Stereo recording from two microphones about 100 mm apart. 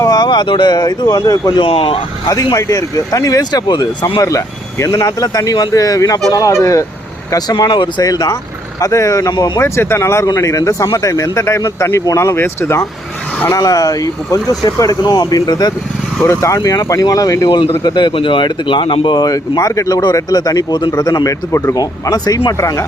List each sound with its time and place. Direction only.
0.0 s speech: 45° left (ahead or behind)
1.6 s speech: 65° left (ahead or behind)
2.2 s speech: 40° left (ahead or behind)
13.5 s speech: 35° left (ahead or behind)
16.2 s speech: 25° left (ahead or behind)
17.6 s speech: 50° left (ahead or behind); by 22.9 s 30° left (ahead or behind)